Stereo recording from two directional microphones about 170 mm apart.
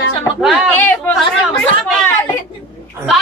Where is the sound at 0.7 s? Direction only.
10° left (ahead or behind).